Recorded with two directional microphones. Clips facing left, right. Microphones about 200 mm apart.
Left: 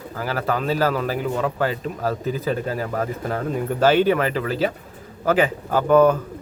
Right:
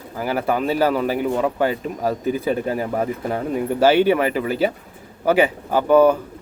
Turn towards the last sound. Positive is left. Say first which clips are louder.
# right 1 dB
turn(degrees=-10)  # may be behind; listen again after turning